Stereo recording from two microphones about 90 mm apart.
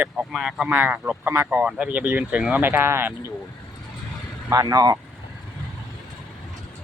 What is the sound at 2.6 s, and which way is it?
Speech, 25° right (ahead or behind).